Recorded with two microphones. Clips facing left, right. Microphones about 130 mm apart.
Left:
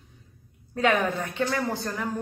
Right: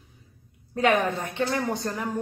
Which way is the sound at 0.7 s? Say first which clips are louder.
Right 1 dB; 20° right (ahead or behind).